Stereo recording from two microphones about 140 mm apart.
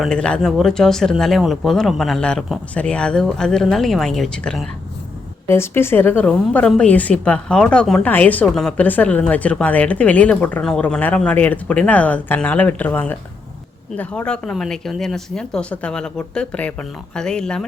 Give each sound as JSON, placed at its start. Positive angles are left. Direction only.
{"t": 0.0, "sound": "speech", "side_deg": 5}
{"t": 5.5, "sound": "a woman's voice", "side_deg": 15}